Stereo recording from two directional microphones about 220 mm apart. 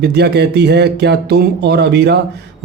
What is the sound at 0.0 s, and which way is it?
Speech, 50° right (ahead or behind).